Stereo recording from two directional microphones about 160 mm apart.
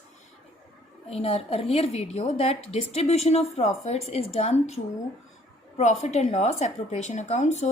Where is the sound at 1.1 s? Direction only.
40° left (ahead or behind).